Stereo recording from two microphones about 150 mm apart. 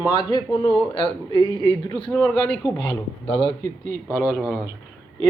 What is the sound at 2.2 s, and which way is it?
Speech, 5° left (ahead or behind).